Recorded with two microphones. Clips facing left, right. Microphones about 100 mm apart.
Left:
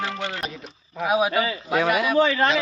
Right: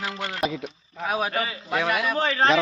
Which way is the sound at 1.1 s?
10° left (ahead or behind).